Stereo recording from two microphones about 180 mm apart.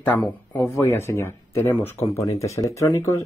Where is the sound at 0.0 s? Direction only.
10° left (ahead or behind).